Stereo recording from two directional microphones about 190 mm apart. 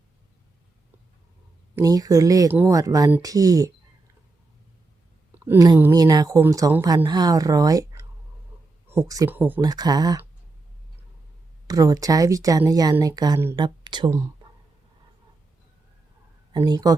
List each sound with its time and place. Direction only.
1.7 s speech: 20° right (ahead or behind)
5.5 s a woman's voice: 15° right (ahead or behind)
9.6 s a woman's voice: 20° right (ahead or behind)
11.7 s a woman's voice: 20° right (ahead or behind)
16.5 s speech: 25° right (ahead or behind)